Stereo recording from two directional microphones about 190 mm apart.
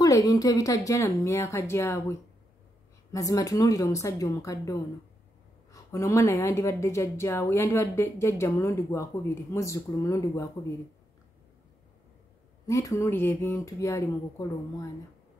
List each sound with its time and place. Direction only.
0.0 s speech: 20° left (ahead or behind)
12.6 s speech: 15° left (ahead or behind)